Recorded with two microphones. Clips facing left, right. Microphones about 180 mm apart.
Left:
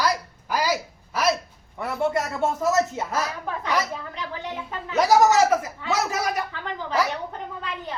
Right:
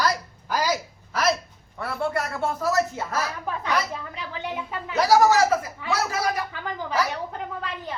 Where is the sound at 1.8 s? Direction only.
20° left (ahead or behind).